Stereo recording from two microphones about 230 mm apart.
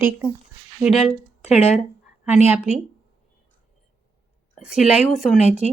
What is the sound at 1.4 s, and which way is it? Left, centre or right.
Speech, left.